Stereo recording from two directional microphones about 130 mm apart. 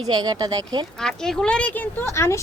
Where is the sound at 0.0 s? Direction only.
30° right (ahead or behind).